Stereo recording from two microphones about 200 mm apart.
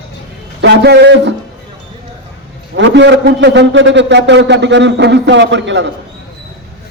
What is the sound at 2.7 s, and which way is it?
A man's voice, 60° right (ahead or behind).